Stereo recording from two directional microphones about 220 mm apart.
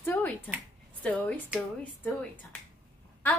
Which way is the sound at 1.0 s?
5° left (ahead or behind).